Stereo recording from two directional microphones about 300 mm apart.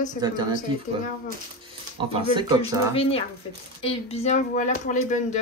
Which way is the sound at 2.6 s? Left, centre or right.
Centre.